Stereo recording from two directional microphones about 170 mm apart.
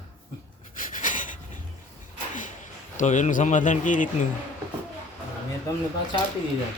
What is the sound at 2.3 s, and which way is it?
A man's voice, 50° left (ahead or behind).